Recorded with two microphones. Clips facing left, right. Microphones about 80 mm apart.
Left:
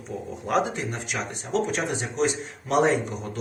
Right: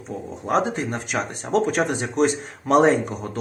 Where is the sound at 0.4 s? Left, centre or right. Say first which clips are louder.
Right 3 dB; right.